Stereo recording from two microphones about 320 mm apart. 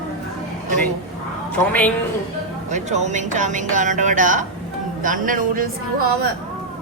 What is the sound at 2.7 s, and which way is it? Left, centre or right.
Speech, right.